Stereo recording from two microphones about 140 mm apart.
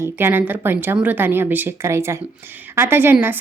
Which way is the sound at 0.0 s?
15° right (ahead or behind).